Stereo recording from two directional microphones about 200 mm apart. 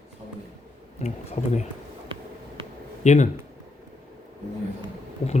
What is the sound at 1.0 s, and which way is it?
Speech, 35° left (ahead or behind).